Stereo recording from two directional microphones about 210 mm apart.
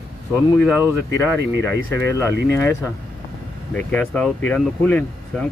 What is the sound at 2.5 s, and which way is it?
Speech, 10° left (ahead or behind).